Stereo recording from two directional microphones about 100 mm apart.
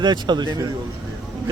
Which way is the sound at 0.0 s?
45° right (ahead or behind).